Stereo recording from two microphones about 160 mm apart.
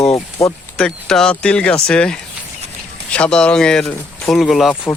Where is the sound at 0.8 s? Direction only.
5° left (ahead or behind).